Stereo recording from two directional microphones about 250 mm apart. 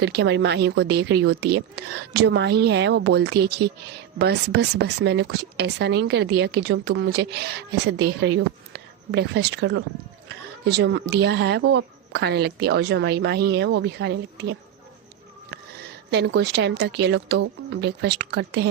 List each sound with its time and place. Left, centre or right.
0.0 s speech: right
16.0 s speech: right